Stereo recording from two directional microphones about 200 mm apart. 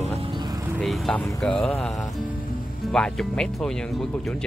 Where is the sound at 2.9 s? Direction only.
5° left (ahead or behind).